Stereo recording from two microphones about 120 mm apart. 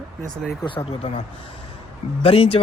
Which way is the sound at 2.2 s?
55° left (ahead or behind).